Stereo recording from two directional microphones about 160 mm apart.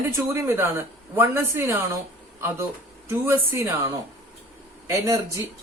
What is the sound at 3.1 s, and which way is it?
Speech, 15° right (ahead or behind).